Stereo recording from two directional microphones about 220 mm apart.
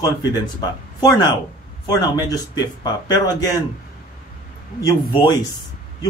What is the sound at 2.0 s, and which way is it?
Speech, 15° left (ahead or behind).